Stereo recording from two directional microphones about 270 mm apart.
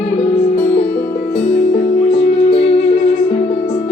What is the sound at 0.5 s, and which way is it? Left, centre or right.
Music, left.